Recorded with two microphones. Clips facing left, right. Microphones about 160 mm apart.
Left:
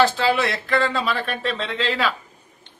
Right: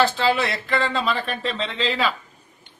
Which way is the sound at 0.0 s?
Centre (ahead or behind).